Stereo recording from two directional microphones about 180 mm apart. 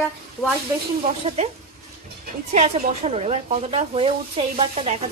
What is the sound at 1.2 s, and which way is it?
Speech, 35° right (ahead or behind).